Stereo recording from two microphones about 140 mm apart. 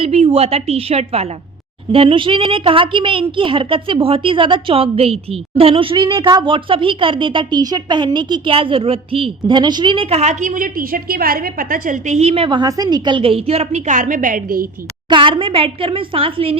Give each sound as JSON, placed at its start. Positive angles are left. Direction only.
{"t": 0.0, "sound": "a woman's voice", "side_deg": -50}
{"t": 15.1, "sound": "a woman's voice", "side_deg": -35}